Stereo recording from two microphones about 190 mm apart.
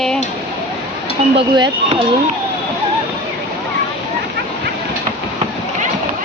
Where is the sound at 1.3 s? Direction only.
30° right (ahead or behind).